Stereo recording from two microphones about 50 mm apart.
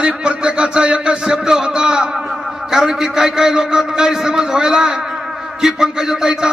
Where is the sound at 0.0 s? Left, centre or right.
Centre.